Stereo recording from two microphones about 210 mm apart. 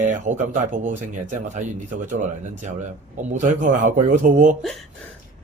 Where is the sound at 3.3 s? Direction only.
35° right (ahead or behind).